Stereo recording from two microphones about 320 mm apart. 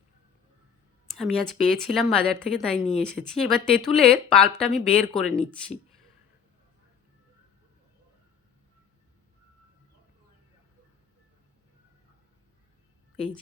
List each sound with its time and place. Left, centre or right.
1.1 s speech: centre
2.7 s speech: centre
3.0 s speech: centre